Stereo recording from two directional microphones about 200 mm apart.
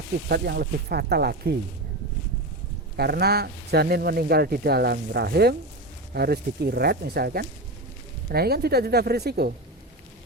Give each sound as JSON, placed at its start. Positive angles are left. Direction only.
{"t": 0.3, "sound": "speech", "side_deg": -55}
{"t": 2.9, "sound": "speech", "side_deg": -50}